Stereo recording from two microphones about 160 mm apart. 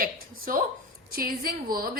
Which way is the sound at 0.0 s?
65° right (ahead or behind).